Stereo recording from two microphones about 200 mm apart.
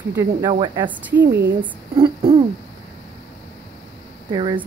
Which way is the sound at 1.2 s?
60° right (ahead or behind).